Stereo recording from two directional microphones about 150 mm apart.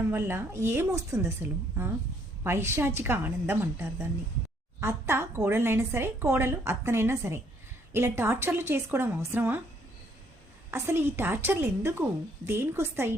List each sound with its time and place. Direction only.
0.0 s a woman's voice: 15° right (ahead or behind)
10.7 s a woman's voice: 15° right (ahead or behind)